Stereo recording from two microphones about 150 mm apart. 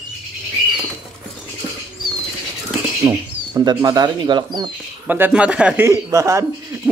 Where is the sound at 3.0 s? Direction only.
25° right (ahead or behind).